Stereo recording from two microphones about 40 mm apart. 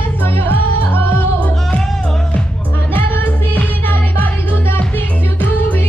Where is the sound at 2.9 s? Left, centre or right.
Left.